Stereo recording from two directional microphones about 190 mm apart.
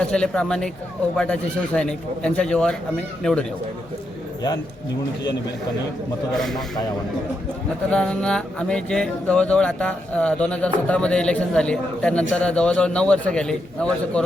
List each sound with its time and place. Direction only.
0.0 s speech: 5° left (ahead or behind)
6.3 s speech: centre (ahead or behind)
7.9 s speech: 5° left (ahead or behind)